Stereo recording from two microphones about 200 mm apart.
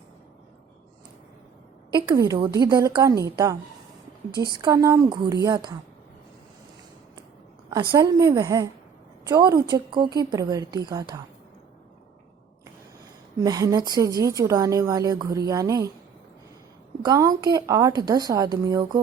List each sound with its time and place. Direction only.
1.9 s a woman's voice: 20° right (ahead or behind)
4.6 s a woman's voice: 15° right (ahead or behind)
7.9 s a woman's voice: 15° right (ahead or behind)
13.3 s a woman's voice: 20° right (ahead or behind)
17.0 s a woman's voice: 15° right (ahead or behind)